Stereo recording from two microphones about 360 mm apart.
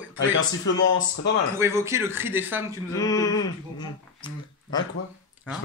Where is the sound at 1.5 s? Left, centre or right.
Centre.